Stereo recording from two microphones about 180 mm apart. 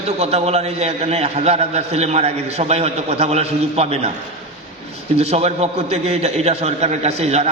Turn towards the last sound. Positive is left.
turn(degrees=-35)  # may be behind; listen again after turning